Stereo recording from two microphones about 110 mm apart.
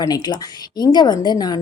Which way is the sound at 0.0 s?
40° left (ahead or behind).